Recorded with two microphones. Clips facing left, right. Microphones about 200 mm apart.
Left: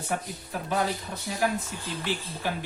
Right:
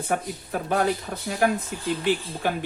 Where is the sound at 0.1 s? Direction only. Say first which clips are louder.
Right 5 dB; 50° right (ahead or behind).